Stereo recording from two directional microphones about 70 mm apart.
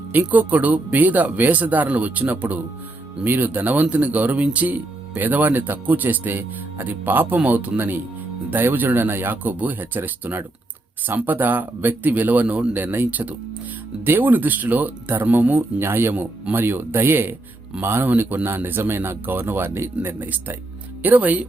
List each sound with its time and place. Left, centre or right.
0.1 s speech: right